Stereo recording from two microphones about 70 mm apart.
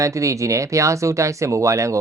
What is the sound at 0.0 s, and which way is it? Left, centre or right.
Speech, right.